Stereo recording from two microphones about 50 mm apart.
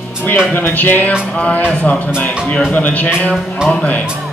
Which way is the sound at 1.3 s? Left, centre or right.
Left.